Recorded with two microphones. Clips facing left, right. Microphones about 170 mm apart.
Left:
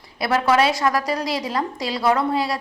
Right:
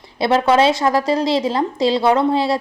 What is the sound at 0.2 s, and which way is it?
Speech, 25° right (ahead or behind).